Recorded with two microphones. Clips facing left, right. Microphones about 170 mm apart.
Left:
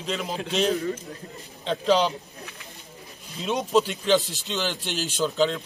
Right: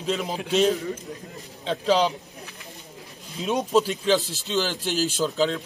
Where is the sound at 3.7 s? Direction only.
Centre (ahead or behind).